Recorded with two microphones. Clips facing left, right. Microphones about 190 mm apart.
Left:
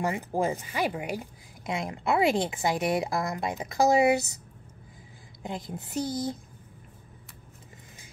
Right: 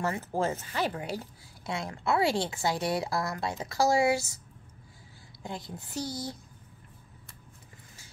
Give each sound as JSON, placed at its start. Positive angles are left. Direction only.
{"t": 0.0, "sound": "a woman's voice", "side_deg": 15}
{"t": 5.7, "sound": "speech", "side_deg": 20}